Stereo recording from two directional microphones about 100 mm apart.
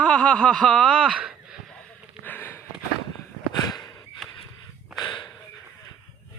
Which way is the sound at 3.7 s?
45° left (ahead or behind).